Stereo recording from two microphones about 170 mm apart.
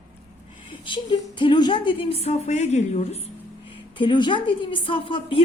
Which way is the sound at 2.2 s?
40° left (ahead or behind).